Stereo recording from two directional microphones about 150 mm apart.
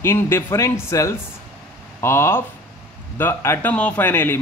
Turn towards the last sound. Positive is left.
turn(degrees=15)  # may be behind; listen again after turning